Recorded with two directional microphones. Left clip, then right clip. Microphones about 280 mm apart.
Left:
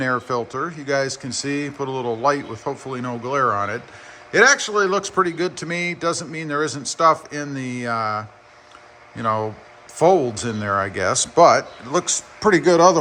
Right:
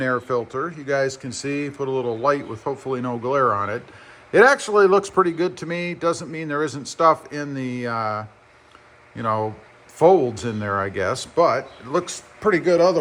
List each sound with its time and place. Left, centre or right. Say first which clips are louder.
0.0 s a man's voice: even; centre